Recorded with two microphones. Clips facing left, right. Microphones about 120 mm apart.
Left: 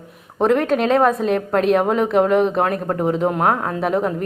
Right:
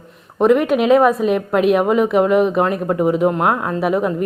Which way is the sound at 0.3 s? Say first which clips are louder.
Right 3 dB; 5° right (ahead or behind).